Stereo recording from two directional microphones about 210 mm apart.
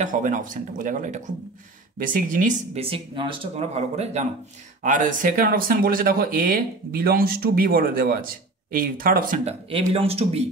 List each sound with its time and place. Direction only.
0.0 s speech: 35° right (ahead or behind)